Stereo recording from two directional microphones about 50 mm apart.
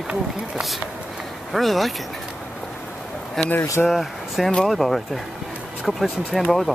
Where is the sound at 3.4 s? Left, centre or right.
Centre.